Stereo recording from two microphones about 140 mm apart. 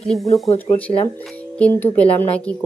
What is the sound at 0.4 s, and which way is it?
Speech, 50° left (ahead or behind).